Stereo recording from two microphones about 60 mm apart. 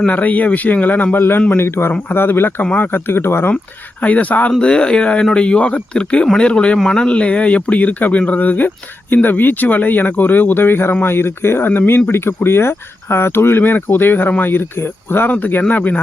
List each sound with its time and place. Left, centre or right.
0.0 s speech: left
3.1 s speech: left
4.0 s speech: left